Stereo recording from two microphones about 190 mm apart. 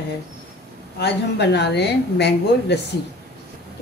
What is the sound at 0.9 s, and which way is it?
Speech, 60° left (ahead or behind).